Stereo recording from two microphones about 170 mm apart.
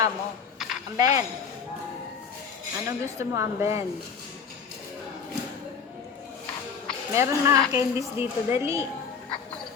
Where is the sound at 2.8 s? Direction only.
15° right (ahead or behind).